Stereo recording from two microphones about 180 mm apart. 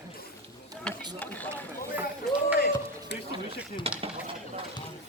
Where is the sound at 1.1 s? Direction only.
10° left (ahead or behind).